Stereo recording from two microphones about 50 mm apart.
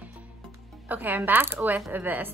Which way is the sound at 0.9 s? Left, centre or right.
Right.